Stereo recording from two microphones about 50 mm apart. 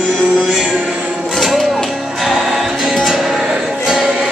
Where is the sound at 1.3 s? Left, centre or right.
Centre.